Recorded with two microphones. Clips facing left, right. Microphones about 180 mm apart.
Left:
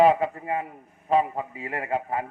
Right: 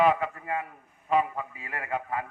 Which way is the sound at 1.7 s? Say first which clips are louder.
Left 4 dB; 25° left (ahead or behind).